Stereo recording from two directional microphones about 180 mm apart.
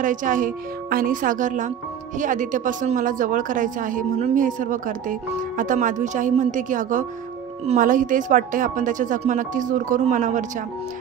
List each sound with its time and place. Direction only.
0.0 s speech: 45° right (ahead or behind)